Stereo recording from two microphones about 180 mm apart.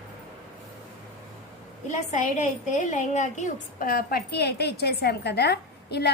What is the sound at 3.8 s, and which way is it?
A woman's voice, 55° left (ahead or behind).